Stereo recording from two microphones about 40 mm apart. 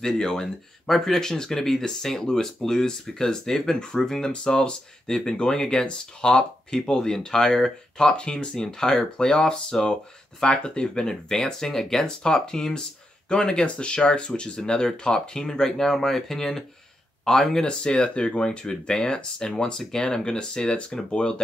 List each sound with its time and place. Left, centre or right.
0.0 s speech: centre